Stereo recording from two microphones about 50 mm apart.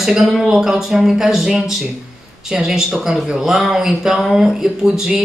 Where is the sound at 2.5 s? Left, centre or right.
Centre.